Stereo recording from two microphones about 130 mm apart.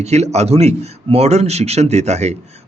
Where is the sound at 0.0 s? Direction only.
55° right (ahead or behind).